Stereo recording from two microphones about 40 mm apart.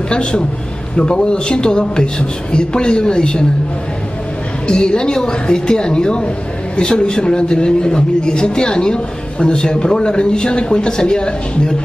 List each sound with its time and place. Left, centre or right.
0.1 s a man's voice: left
4.6 s a man's voice: centre